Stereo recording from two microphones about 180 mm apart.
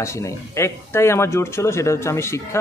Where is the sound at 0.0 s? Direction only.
15° left (ahead or behind).